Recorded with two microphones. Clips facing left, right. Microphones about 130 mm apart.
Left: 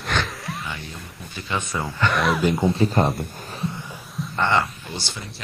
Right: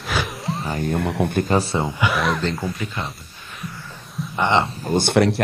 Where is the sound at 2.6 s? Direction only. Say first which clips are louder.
Left 7 dB; 25° left (ahead or behind).